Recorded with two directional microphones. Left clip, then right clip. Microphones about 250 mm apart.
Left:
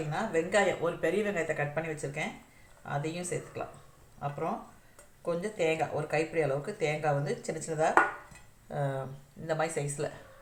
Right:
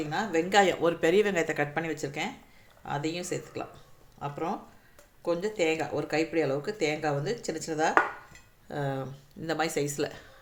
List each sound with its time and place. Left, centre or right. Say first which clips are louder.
0.1 s speech: right 3 dB; right